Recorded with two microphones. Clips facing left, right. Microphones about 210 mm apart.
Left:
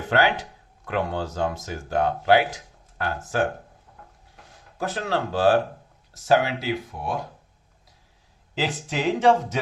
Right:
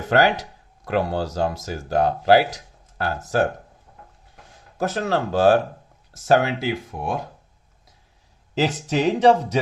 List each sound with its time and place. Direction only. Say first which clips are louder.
0.1 s speech: right 4 dB; 40° right (ahead or behind)
4.8 s speech: right 4 dB; 45° right (ahead or behind)
8.5 s speech: right 6 dB; 40° right (ahead or behind)